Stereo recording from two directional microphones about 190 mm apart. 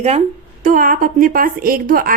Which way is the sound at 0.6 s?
45° right (ahead or behind).